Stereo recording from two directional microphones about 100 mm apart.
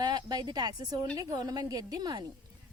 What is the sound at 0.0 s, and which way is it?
A woman's voice, 45° right (ahead or behind).